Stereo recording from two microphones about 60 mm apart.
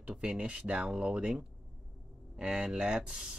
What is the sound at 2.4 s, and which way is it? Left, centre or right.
Speech, centre.